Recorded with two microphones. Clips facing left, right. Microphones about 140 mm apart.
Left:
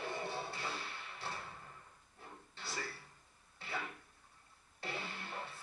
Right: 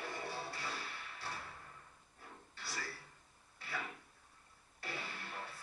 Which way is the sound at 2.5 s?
25° left (ahead or behind).